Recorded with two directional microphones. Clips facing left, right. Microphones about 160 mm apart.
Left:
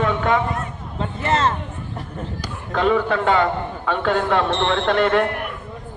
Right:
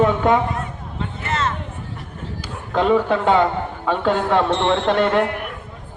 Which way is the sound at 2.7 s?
15° right (ahead or behind).